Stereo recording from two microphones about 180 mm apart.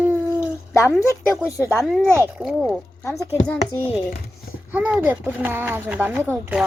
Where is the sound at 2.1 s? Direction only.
15° right (ahead or behind).